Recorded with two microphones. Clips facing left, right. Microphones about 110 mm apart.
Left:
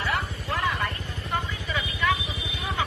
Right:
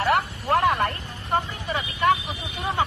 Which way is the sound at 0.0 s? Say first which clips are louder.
Right 7 dB; 60° right (ahead or behind).